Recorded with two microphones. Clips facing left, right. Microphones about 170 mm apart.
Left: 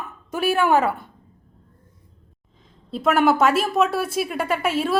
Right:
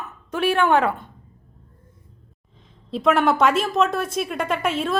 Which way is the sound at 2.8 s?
Centre (ahead or behind).